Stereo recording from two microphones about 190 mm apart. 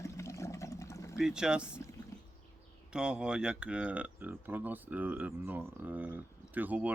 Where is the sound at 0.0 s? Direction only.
15° left (ahead or behind).